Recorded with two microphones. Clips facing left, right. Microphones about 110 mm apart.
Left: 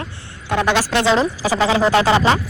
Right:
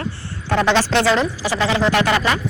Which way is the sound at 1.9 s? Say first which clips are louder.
Left 3 dB; 25° left (ahead or behind).